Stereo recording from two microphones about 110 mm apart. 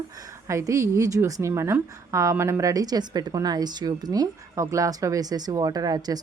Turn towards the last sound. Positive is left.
turn(degrees=-35)  # may be behind; listen again after turning